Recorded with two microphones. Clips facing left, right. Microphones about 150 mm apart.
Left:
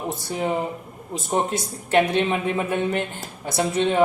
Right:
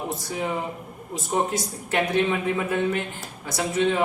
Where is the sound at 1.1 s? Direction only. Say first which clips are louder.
Left 1 dB; 25° left (ahead or behind).